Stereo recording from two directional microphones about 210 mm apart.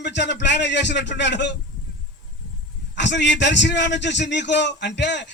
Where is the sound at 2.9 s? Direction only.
55° left (ahead or behind).